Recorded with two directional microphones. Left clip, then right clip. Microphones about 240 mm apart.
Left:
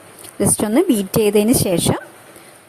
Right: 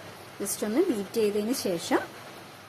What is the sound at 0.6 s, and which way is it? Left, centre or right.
Speech, left.